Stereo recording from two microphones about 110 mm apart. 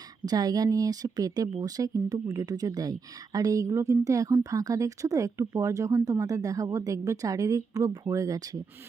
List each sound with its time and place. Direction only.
0.3 s speech: 35° right (ahead or behind)